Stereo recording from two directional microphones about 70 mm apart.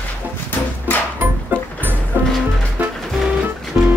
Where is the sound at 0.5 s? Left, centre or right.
Left.